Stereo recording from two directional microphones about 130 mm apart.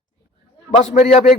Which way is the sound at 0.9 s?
50° left (ahead or behind).